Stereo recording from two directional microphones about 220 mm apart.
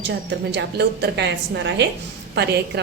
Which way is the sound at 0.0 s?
50° right (ahead or behind).